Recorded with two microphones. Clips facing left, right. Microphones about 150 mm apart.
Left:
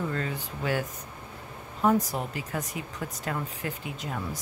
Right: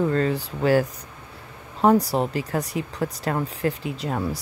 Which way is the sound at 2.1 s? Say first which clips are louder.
Right 9 dB; 90° right.